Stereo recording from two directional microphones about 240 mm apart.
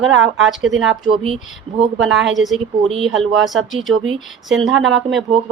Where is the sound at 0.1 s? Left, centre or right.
Right.